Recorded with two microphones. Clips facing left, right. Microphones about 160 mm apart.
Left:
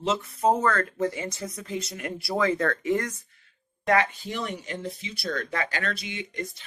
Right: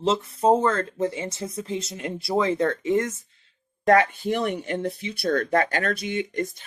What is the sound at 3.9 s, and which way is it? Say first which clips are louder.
Speech: right 5 dB; 50° right (ahead or behind).